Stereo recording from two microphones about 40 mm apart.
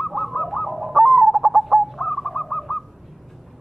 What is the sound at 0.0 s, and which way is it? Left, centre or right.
Owl, centre.